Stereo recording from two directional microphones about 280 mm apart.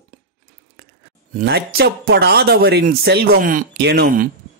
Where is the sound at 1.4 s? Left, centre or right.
Right.